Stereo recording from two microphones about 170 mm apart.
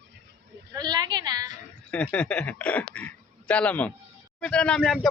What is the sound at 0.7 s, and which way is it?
Speech, 25° right (ahead or behind).